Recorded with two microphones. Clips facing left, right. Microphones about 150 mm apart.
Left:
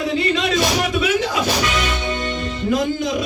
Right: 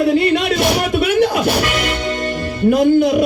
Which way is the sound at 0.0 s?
60° right (ahead or behind).